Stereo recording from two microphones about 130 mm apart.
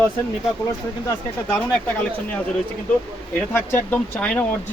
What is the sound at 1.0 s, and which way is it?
Speech, 15° left (ahead or behind).